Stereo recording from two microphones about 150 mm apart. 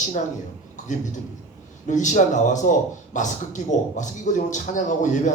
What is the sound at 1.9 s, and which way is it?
Speech, 55° left (ahead or behind).